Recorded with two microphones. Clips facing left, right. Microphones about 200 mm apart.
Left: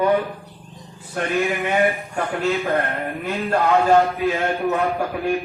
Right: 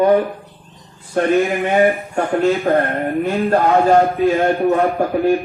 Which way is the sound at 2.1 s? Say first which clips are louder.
Right 6 dB; 40° right (ahead or behind).